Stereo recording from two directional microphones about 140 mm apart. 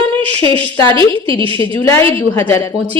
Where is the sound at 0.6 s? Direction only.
15° left (ahead or behind).